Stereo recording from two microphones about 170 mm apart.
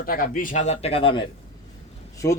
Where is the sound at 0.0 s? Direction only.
60° left (ahead or behind).